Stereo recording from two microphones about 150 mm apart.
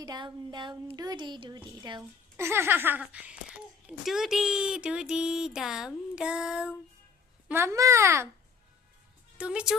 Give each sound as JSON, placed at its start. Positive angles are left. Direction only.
{"t": 0.0, "sound": "a woman's voice", "side_deg": -30}
{"t": 2.3, "sound": "a child's voice", "side_deg": -15}
{"t": 9.4, "sound": "a child's voice", "side_deg": -5}